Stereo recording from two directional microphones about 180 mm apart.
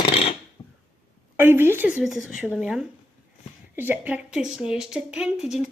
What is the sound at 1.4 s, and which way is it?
A woman's voice, 15° right (ahead or behind).